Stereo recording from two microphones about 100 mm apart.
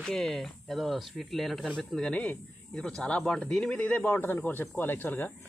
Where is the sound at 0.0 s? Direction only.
5° left (ahead or behind).